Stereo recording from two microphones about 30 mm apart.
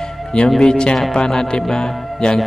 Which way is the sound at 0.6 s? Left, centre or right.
Left.